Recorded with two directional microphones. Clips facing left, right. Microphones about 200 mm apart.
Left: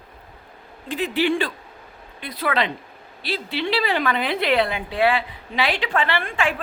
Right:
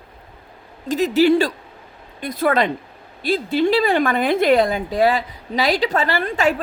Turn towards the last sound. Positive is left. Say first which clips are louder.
# right 5 dB
turn(degrees=-40)  # may be behind; listen again after turning